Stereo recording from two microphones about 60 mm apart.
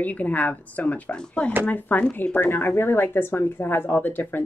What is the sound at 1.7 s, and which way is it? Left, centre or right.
Speech, left.